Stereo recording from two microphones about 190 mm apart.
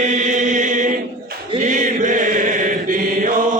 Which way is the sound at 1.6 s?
40° right (ahead or behind).